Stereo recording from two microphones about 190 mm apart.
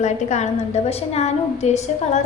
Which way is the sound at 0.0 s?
35° left (ahead or behind).